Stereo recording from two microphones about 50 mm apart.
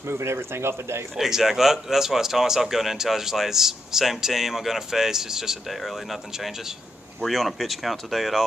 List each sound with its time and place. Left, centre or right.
0.2 s speech: right
1.1 s speech: centre